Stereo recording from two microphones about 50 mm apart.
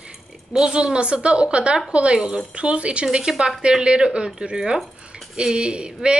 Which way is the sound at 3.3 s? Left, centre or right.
Centre.